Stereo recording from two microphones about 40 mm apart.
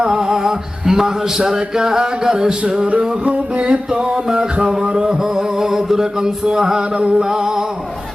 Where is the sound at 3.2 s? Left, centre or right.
Right.